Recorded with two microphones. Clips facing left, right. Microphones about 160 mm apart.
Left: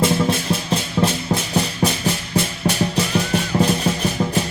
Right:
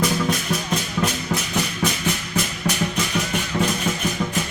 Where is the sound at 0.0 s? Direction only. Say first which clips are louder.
Left 4 dB; 25° left (ahead or behind).